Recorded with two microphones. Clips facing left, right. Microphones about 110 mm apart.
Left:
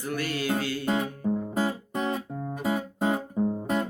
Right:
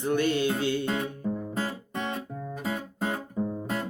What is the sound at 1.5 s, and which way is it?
Guitar, 20° left (ahead or behind).